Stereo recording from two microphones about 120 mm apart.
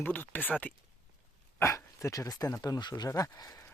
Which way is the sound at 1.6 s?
25° left (ahead or behind).